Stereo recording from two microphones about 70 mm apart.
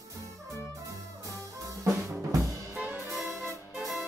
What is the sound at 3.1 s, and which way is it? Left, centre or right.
Music, centre.